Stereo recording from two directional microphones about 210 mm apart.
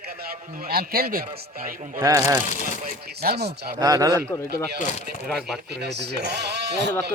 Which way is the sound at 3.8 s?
15° right (ahead or behind).